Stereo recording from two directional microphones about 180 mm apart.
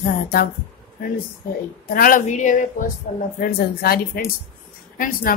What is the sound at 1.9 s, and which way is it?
Speech, 50° left (ahead or behind).